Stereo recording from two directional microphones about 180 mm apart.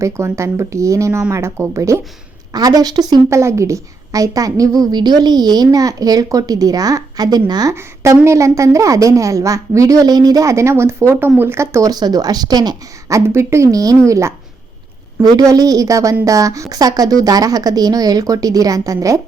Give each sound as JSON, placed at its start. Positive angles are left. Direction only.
{"t": 0.0, "sound": "a woman's voice", "side_deg": -15}